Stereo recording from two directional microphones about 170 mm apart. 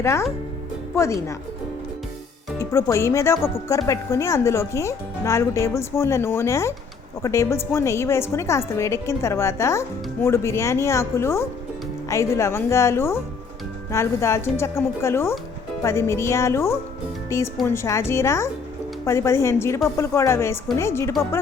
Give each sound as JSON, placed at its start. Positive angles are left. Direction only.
{"t": 0.0, "sound": "a woman's voice", "side_deg": 15}
{"t": 2.6, "sound": "a woman's voice", "side_deg": 15}